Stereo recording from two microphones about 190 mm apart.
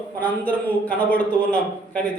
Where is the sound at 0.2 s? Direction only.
10° left (ahead or behind).